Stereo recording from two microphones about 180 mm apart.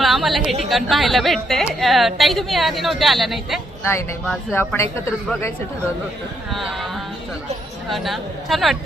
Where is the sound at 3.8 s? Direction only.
15° left (ahead or behind).